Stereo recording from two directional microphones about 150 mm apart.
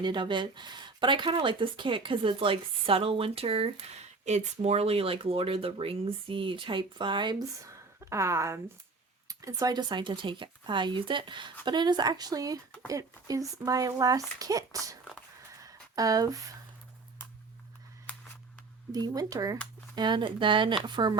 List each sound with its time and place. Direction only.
0.0 s speech: 30° right (ahead or behind)
15.6 s a sound: 25° right (ahead or behind)
18.9 s speech: 25° right (ahead or behind)